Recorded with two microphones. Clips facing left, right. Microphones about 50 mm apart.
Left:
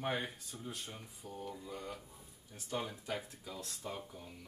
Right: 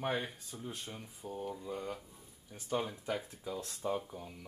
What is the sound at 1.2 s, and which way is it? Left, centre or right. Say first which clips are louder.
Speech: right 5 dB; right.